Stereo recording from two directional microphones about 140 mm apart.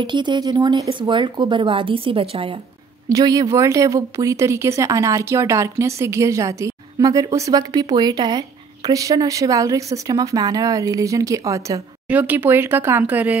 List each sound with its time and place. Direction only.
0.0 s speech: 35° right (ahead or behind)
3.1 s speech: 25° right (ahead or behind)
12.1 s speech: 10° right (ahead or behind)